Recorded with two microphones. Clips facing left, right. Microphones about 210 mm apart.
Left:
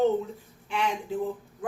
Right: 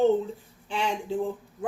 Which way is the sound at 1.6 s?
25° right (ahead or behind).